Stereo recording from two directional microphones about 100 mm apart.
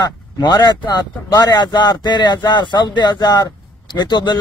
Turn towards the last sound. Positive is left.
turn(degrees=45)  # may be behind; listen again after turning